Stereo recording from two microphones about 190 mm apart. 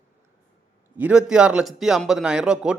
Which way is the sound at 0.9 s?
5° right (ahead or behind).